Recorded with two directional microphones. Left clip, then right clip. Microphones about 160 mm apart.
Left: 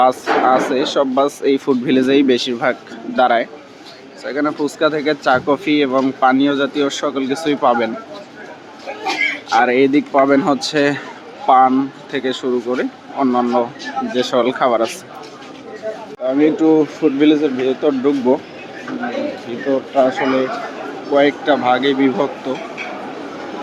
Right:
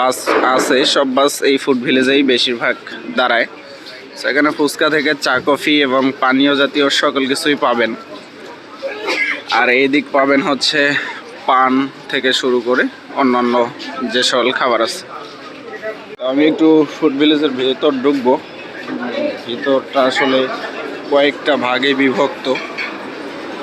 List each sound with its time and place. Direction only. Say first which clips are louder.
0.0 s speech: even; 10° left (ahead or behind)
9.6 s speech: even; 20° left (ahead or behind)
11.4 s speech: left 1 dB; 10° left (ahead or behind)
12.6 s speech: right 5 dB; centre (ahead or behind)
14.1 s speech: right 3 dB; 10° left (ahead or behind)
16.2 s speech: right 2 dB; 10° left (ahead or behind)
19.5 s speech: right 3 dB; 5° left (ahead or behind)